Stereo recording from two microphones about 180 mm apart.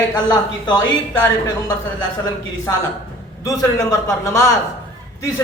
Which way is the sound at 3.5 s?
15° left (ahead or behind).